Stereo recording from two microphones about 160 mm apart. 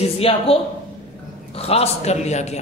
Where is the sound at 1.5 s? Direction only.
40° left (ahead or behind).